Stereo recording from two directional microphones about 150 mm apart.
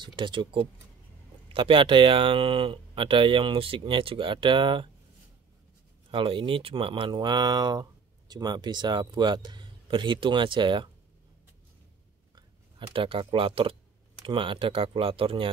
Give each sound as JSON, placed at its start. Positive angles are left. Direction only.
{"t": 0.0, "sound": "speech", "side_deg": -30}
{"t": 6.1, "sound": "speech", "side_deg": -35}
{"t": 12.4, "sound": "speech", "side_deg": -35}